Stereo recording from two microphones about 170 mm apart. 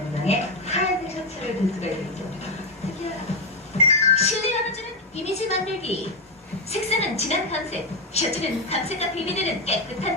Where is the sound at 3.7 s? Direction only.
40° left (ahead or behind).